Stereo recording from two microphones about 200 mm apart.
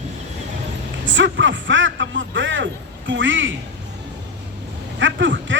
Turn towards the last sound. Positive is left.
turn(degrees=-65)  # may be behind; listen again after turning